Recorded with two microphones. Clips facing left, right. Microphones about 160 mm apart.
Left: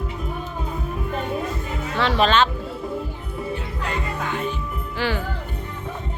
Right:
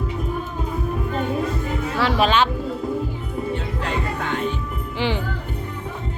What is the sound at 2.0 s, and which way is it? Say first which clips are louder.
Speech: even; 10° right (ahead or behind).